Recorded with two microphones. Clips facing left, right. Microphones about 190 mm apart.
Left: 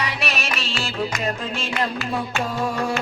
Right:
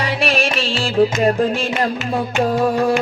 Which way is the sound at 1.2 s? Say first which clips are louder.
Right 10 dB; 55° right (ahead or behind).